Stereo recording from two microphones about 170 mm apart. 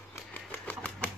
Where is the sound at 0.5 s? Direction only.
10° left (ahead or behind).